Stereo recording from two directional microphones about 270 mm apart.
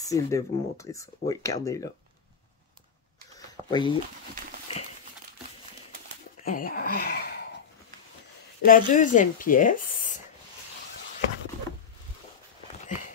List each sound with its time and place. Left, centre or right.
0.0 s speech: centre
3.3 s a sound: centre
6.4 s speech: left
8.6 s speech: left